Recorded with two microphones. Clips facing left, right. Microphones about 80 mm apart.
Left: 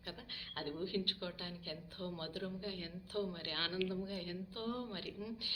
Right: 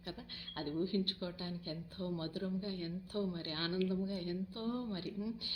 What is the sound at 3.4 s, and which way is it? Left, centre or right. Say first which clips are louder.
A woman's voice: right 3 dB; right.